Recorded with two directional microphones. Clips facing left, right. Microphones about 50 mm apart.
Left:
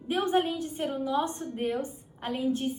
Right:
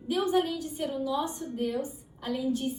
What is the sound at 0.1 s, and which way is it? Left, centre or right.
A woman's voice, left.